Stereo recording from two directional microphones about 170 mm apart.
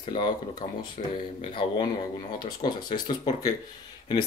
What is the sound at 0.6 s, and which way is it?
Speech, 35° left (ahead or behind).